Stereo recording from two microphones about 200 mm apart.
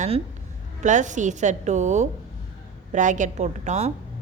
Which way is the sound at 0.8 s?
40° right (ahead or behind).